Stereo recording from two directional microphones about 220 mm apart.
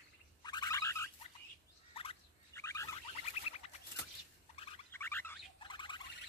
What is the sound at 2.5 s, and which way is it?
Bird, 15° left (ahead or behind).